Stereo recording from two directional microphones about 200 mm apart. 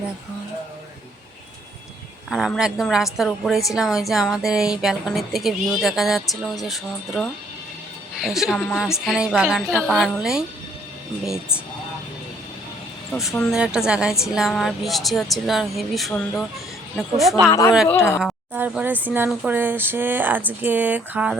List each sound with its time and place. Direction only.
2.3 s a woman's voice: centre (ahead or behind)
13.1 s a woman's voice: centre (ahead or behind)
17.5 s speech: 15° left (ahead or behind)
18.2 s speech: 5° right (ahead or behind)